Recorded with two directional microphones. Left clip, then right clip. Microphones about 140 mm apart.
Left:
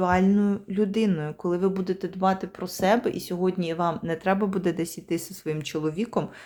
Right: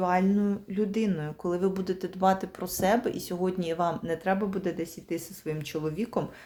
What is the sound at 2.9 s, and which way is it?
Speech, 30° left (ahead or behind).